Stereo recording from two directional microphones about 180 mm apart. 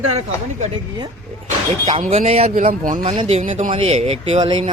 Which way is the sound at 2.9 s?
30° right (ahead or behind).